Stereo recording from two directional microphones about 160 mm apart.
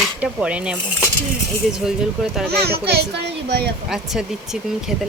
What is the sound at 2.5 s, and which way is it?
A child's voice, 90° right.